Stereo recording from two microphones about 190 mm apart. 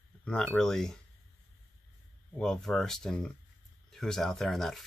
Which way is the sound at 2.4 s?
5° left (ahead or behind).